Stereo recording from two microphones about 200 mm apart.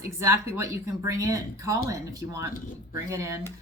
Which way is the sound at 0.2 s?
15° right (ahead or behind).